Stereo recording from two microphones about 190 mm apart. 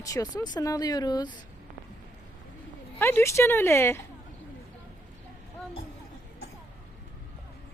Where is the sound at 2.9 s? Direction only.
10° left (ahead or behind).